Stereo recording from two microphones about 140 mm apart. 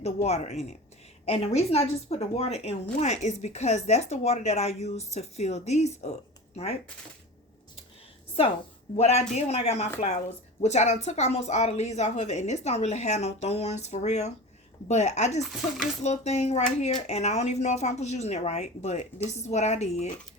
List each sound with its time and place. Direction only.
0.0 s a woman's voice: 50° left (ahead or behind)
9.0 s a woman's voice: 50° left (ahead or behind)